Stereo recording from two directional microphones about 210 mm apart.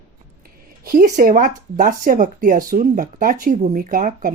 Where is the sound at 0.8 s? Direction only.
45° right (ahead or behind).